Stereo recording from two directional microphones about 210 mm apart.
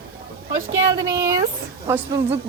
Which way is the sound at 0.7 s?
15° right (ahead or behind).